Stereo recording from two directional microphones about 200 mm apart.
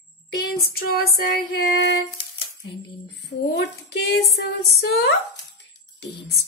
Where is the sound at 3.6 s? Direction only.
55° left (ahead or behind).